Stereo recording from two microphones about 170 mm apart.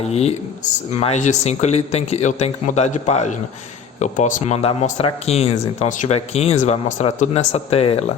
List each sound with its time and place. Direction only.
0.0 s speech: 40° left (ahead or behind)